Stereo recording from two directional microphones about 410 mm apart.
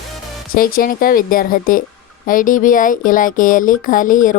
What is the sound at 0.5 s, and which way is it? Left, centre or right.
Speech, left.